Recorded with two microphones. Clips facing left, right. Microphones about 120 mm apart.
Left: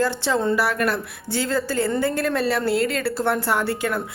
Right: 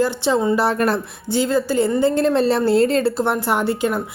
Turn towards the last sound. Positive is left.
turn(degrees=-20)  # may be behind; listen again after turning